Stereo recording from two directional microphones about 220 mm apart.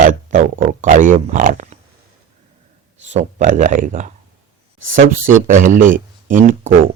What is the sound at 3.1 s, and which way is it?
Speech, 30° right (ahead or behind).